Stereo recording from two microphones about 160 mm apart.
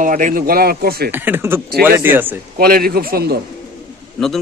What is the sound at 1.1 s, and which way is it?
A man's voice, 10° right (ahead or behind).